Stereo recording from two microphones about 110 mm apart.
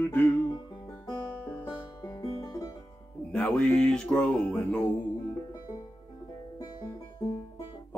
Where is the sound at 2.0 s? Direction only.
40° left (ahead or behind).